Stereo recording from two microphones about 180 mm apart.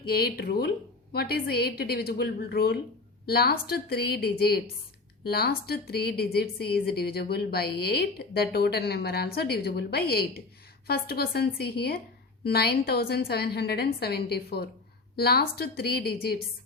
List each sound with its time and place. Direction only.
0.0 s a woman's voice: 60° left (ahead or behind)